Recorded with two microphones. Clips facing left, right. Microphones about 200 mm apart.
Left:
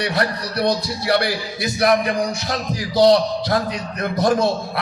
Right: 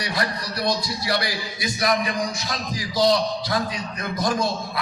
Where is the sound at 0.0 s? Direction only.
60° left (ahead or behind).